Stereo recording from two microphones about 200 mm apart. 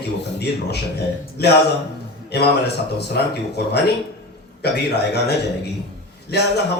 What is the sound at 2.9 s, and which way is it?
A man's voice, 55° left (ahead or behind).